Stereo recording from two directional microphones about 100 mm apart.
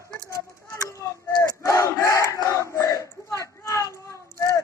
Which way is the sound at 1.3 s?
30° left (ahead or behind).